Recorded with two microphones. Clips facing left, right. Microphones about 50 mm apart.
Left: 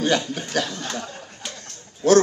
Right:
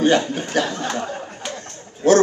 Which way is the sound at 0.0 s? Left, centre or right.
Right.